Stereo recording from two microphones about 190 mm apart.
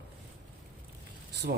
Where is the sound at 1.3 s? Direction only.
60° right (ahead or behind).